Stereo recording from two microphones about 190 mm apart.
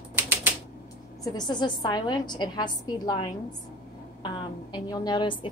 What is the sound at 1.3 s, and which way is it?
A woman's voice, 25° left (ahead or behind).